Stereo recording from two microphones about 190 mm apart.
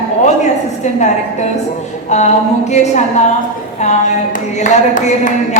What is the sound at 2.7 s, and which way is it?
Speech, 35° left (ahead or behind).